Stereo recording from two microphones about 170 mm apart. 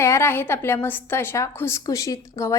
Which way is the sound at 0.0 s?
15° left (ahead or behind).